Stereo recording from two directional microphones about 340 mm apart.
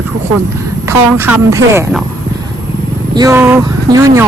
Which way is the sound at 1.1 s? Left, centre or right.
Centre.